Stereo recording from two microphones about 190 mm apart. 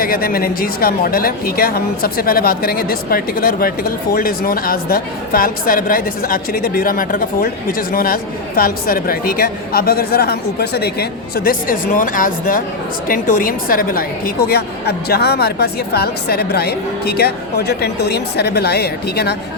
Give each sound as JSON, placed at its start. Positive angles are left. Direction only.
{"t": 0.0, "sound": "a woman's voice", "side_deg": 50}